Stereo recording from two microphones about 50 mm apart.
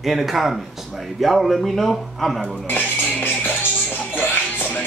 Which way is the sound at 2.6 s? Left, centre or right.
Left.